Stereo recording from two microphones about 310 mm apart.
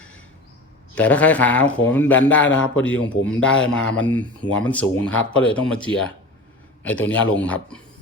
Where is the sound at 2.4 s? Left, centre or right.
Left.